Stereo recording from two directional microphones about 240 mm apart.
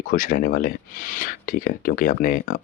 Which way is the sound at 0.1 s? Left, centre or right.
Left.